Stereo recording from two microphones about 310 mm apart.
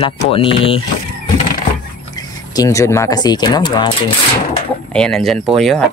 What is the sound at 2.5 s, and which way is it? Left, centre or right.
Speech, centre.